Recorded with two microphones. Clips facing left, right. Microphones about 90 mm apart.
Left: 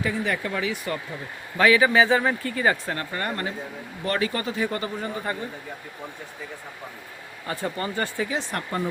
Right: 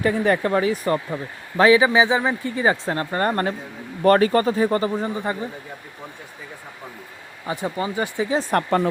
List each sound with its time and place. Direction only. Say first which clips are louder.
0.0 s speech: right 7 dB; 45° right (ahead or behind); by 2.7 s 20° right (ahead or behind)
2.8 s speech: right 7 dB; 30° right (ahead or behind)
7.4 s speech: right 4 dB; 15° right (ahead or behind)
8.3 s speech: right 8 dB; 45° right (ahead or behind)